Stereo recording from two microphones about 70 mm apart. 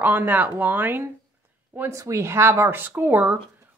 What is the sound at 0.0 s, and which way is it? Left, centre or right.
Speech, right.